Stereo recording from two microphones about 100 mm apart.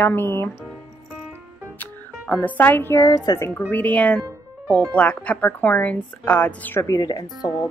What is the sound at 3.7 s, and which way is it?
A woman's voice, 15° left (ahead or behind).